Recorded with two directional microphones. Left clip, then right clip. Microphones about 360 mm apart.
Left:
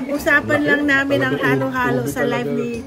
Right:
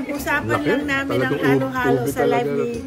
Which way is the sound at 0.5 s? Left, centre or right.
Right.